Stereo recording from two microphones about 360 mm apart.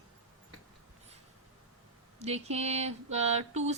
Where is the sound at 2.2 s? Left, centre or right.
Centre.